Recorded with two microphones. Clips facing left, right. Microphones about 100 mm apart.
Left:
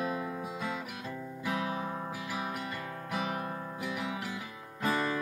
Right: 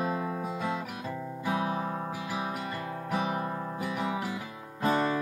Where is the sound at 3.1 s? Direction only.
30° right (ahead or behind).